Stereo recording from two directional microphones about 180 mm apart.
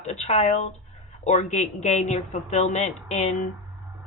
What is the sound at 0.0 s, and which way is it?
A woman's voice, 40° left (ahead or behind).